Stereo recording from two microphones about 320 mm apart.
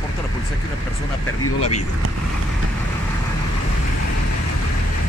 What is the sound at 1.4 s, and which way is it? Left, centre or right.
Speech, left.